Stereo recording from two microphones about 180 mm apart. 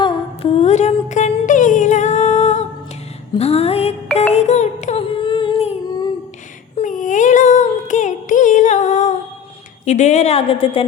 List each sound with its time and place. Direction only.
0.0 s humming: 30° left (ahead or behind)
3.3 s a woman's voice: 35° left (ahead or behind)
4.2 s music: 35° left (ahead or behind)
6.7 s a sound: 45° left (ahead or behind)
9.8 s a woman's voice: 40° left (ahead or behind)